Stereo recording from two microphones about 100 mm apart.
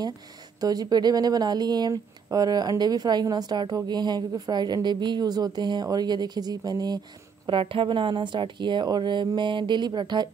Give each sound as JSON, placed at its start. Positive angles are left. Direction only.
{"t": 0.6, "sound": "speech", "side_deg": -40}
{"t": 7.4, "sound": "speech", "side_deg": -60}